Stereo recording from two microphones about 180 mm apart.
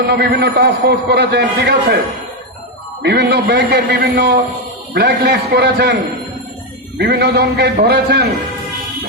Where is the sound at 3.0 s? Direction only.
65° right (ahead or behind).